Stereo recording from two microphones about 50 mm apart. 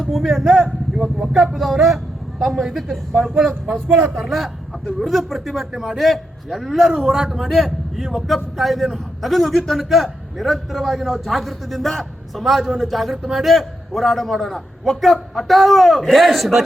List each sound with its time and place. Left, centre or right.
0.0 s a man's voice: centre
0.5 s a man's voice: centre